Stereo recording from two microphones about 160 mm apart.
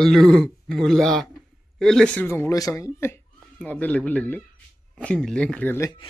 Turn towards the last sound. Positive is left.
turn(degrees=15)  # may be behind; listen again after turning